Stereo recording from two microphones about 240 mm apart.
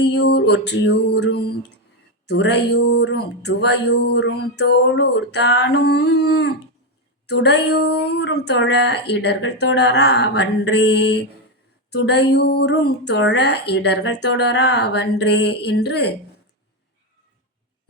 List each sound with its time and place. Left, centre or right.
0.0 s a woman's voice: left
2.2 s a sound: left
3.0 s a woman's voice: left